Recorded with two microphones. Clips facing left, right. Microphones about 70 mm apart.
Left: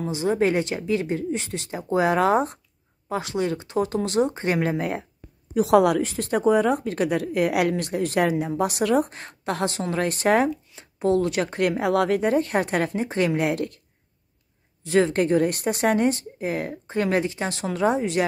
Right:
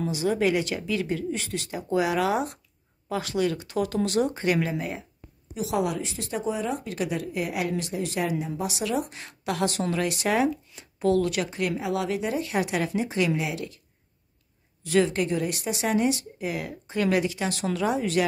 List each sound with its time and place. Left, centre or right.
0.1 s speech: left
4.6 s a woman's voice: left
10.8 s speech: left
11.4 s a woman's voice: left
14.8 s speech: left
15.1 s speech: left